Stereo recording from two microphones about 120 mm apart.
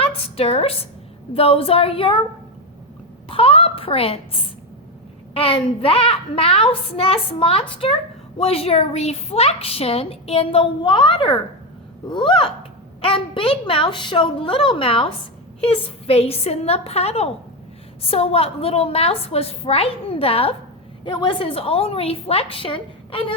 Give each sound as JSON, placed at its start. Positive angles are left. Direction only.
{"t": 0.0, "sound": "a sound", "side_deg": 55}
{"t": 1.3, "sound": "a woman's voice", "side_deg": 50}
{"t": 3.2, "sound": "a child's voice", "side_deg": 50}
{"t": 5.3, "sound": "a woman's voice", "side_deg": 55}
{"t": 21.0, "sound": "a woman's voice", "side_deg": 45}